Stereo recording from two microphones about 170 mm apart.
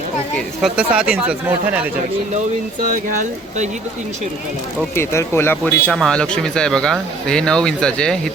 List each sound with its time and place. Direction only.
0.3 s speech: 5° right (ahead or behind)
2.8 s speech: 50° right (ahead or behind)
4.9 s speech: 15° left (ahead or behind)
5.8 s speech: 5° left (ahead or behind)